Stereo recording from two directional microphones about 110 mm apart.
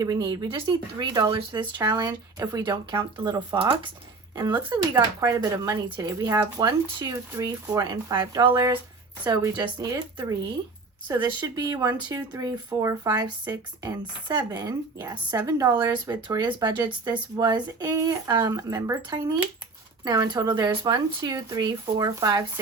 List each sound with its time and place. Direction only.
0.0 s speech: 40° right (ahead or behind)
0.4 s speech: 50° right (ahead or behind)
1.8 s speech: 35° right (ahead or behind)
20.1 s speech: 40° right (ahead or behind)